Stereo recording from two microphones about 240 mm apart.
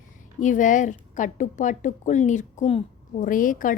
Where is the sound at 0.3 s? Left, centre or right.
Left.